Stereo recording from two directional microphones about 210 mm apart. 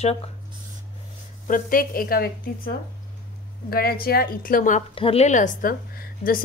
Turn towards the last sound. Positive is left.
turn(degrees=45)  # may be behind; listen again after turning